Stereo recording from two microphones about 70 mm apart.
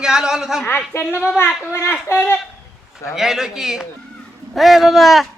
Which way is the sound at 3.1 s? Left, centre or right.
Centre.